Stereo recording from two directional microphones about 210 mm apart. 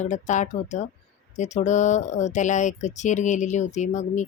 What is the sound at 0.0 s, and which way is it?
Speech, 35° left (ahead or behind).